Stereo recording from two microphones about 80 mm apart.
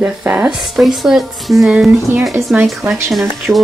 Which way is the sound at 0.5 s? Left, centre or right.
Centre.